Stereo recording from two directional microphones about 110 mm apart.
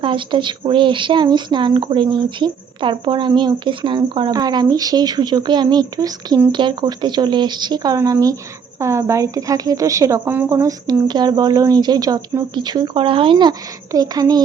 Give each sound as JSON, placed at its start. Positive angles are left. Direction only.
{"t": 0.0, "sound": "speech", "side_deg": -50}
{"t": 4.3, "sound": "speech", "side_deg": -35}
{"t": 10.3, "sound": "speech", "side_deg": -15}
{"t": 10.6, "sound": "speech", "side_deg": -30}